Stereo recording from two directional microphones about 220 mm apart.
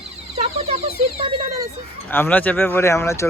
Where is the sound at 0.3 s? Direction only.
25° right (ahead or behind).